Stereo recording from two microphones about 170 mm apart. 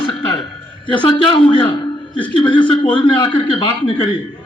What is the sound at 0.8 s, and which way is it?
Speech, 30° left (ahead or behind).